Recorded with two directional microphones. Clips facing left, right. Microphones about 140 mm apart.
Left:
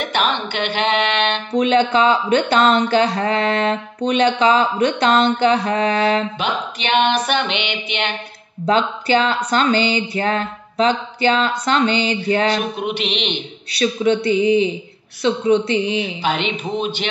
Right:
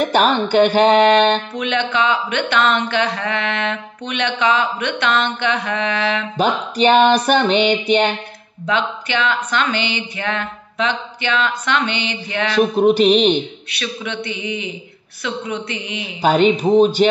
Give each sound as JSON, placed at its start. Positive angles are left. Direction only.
{"t": 0.0, "sound": "music", "side_deg": -40}
{"t": 1.5, "sound": "speech", "side_deg": 35}
{"t": 6.3, "sound": "music", "side_deg": -40}
{"t": 8.6, "sound": "speech", "side_deg": 35}
{"t": 12.5, "sound": "music", "side_deg": -40}
{"t": 13.7, "sound": "speech", "side_deg": 35}
{"t": 16.2, "sound": "music", "side_deg": -45}